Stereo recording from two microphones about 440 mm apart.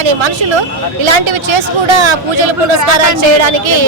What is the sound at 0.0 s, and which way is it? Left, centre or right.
Speech, right.